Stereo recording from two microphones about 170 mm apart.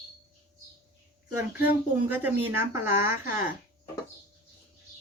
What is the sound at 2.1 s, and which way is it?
Speech, 10° right (ahead or behind).